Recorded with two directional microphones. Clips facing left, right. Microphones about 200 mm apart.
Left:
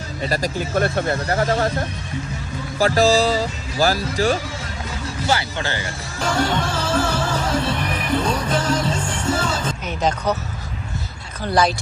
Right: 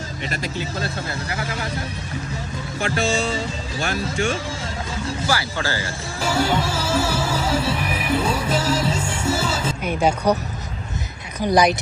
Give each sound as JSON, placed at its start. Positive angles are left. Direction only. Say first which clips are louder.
{"t": 0.2, "sound": "speech", "louder": "left 7 dB", "side_deg": 40}
{"t": 0.8, "sound": "speech", "louder": "left 8 dB", "side_deg": 55}
{"t": 2.8, "sound": "speech", "louder": "left 7 dB", "side_deg": 35}
{"t": 5.3, "sound": "a man's voice", "louder": "left 3 dB", "side_deg": 25}
{"t": 6.1, "sound": "music", "louder": "even", "side_deg": -5}
{"t": 11.3, "sound": "speech", "louder": "right 2 dB", "side_deg": -15}